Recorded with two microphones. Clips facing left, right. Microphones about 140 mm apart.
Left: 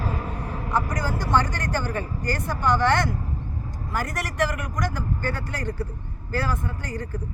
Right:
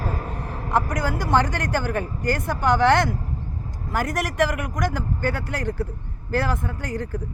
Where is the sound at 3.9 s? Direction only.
50° right (ahead or behind).